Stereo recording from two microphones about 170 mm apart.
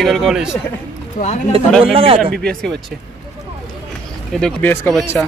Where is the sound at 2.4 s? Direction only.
5° left (ahead or behind).